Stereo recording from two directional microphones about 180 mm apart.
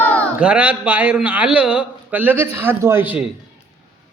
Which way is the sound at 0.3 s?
5° right (ahead or behind).